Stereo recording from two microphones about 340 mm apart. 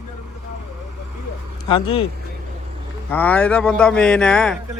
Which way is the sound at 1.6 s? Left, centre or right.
Centre.